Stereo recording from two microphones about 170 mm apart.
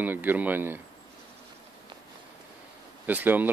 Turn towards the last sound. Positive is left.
turn(degrees=-10)  # may be behind; listen again after turning